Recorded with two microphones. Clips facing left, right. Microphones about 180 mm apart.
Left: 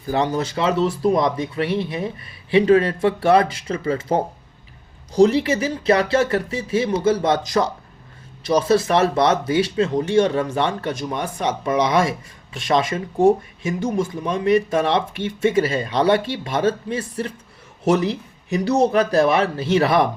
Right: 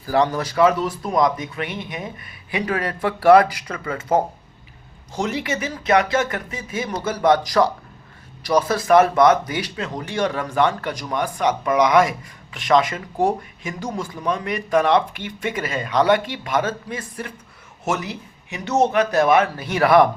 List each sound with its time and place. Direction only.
0.0 s speech: 20° left (ahead or behind)